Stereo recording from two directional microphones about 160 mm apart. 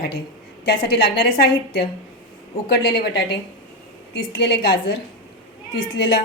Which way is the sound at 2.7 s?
80° left.